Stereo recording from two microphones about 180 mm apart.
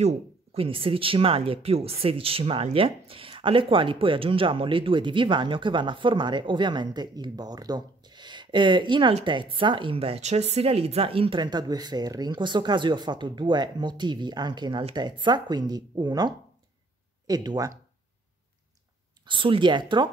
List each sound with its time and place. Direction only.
0.0 s speech: 35° right (ahead or behind)
19.2 s speech: 30° right (ahead or behind)